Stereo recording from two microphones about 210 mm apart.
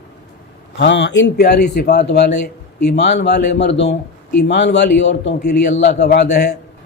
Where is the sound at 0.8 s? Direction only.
55° left (ahead or behind).